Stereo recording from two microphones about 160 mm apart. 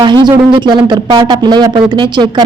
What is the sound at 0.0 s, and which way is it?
Speech, 25° right (ahead or behind).